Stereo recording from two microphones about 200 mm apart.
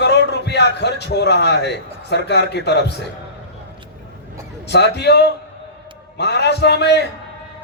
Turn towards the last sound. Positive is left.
turn(degrees=55)  # may be behind; listen again after turning